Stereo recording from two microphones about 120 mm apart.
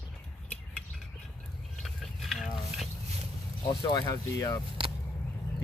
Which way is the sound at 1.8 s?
Centre (ahead or behind).